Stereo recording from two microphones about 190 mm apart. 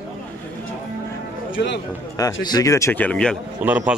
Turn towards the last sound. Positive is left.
turn(degrees=-10)  # may be behind; listen again after turning